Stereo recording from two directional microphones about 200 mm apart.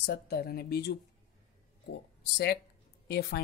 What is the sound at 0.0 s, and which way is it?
Speech, 55° left (ahead or behind).